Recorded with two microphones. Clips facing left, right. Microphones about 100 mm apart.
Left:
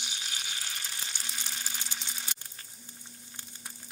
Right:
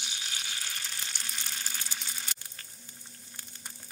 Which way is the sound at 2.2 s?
15° left (ahead or behind).